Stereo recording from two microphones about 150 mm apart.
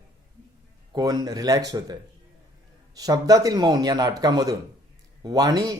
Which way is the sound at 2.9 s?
25° right (ahead or behind).